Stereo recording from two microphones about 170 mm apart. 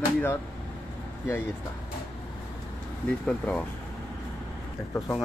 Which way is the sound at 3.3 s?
5° left (ahead or behind).